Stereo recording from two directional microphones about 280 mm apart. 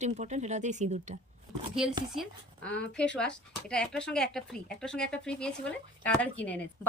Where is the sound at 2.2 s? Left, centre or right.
Centre.